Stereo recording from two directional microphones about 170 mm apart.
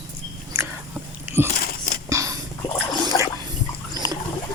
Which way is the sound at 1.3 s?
15° right (ahead or behind).